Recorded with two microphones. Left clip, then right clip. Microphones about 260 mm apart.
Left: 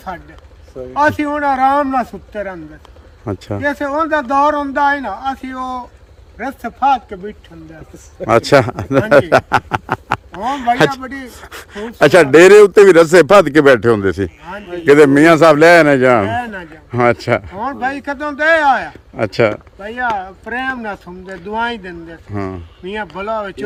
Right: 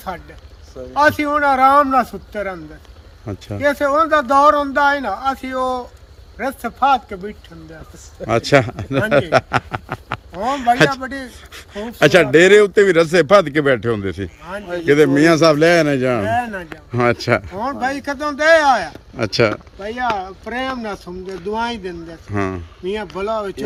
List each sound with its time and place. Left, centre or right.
0.9 s a man's voice: centre
3.3 s speech: centre
3.6 s a man's voice: centre
8.3 s a man's voice: centre
11.3 s speech: centre
14.6 s a man's voice: centre
14.8 s a man's voice: centre
22.3 s a man's voice: centre
22.8 s a man's voice: centre